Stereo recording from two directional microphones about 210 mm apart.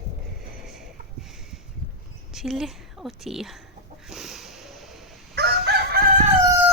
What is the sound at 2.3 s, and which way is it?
A woman's voice, centre (ahead or behind).